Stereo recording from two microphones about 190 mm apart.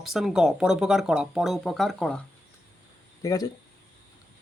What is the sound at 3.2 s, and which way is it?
Speech, 20° left (ahead or behind).